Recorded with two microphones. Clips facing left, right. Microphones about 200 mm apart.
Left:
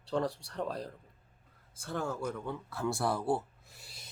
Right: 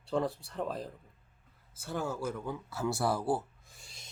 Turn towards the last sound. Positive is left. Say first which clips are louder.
# left 1 dB
turn(degrees=5)  # may be behind; listen again after turning